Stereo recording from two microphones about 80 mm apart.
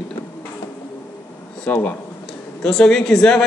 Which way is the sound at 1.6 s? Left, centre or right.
Centre.